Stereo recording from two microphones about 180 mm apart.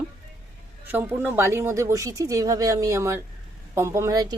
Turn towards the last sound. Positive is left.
turn(degrees=-20)  # may be behind; listen again after turning